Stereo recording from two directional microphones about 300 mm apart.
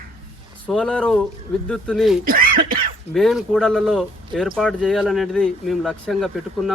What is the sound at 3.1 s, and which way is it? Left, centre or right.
Speech, centre.